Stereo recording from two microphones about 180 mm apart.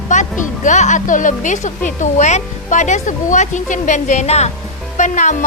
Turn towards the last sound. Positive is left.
turn(degrees=40)  # may be behind; listen again after turning